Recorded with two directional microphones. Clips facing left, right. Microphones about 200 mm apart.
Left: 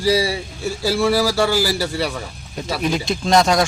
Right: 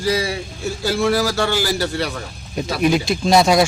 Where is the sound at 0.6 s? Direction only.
5° left (ahead or behind).